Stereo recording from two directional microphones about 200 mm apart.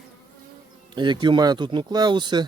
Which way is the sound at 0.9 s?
20° right (ahead or behind).